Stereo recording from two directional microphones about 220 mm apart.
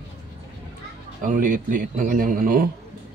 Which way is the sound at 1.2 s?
35° right (ahead or behind).